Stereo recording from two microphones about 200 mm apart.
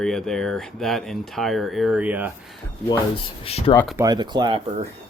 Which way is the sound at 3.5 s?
30° left (ahead or behind).